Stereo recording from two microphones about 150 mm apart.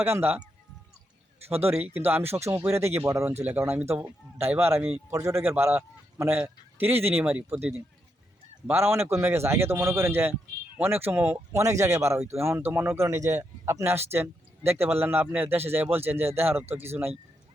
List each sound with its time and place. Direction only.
0.0 s a man's voice: 15° right (ahead or behind)
1.5 s a man's voice: 15° right (ahead or behind)